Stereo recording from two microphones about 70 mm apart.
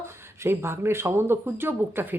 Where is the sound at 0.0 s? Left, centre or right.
Right.